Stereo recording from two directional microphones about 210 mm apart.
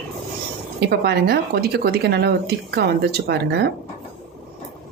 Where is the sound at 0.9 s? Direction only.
50° right (ahead or behind).